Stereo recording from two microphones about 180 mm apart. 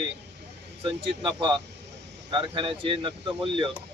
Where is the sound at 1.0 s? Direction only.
30° right (ahead or behind).